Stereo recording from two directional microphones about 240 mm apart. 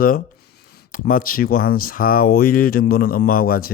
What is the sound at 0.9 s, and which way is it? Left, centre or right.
Speech, left.